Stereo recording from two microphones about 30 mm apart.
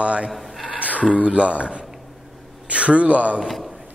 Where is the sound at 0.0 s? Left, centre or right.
Right.